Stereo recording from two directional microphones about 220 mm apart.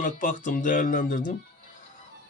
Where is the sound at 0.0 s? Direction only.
35° left (ahead or behind).